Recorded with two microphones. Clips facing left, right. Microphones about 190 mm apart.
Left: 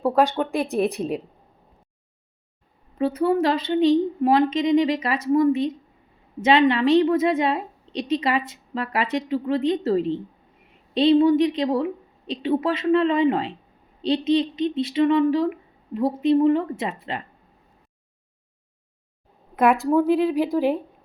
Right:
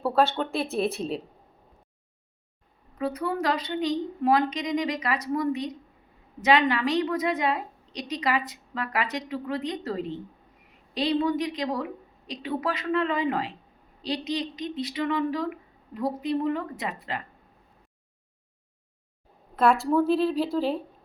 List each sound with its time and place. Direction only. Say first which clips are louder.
0.0 s a woman's voice: left 4 dB; 15° left (ahead or behind)
3.0 s a woman's voice: left 8 dB; 25° left (ahead or behind)
19.5 s a woman's voice: left 3 dB; 15° left (ahead or behind)